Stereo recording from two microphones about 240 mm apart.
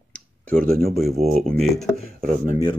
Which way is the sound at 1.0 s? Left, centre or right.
Centre.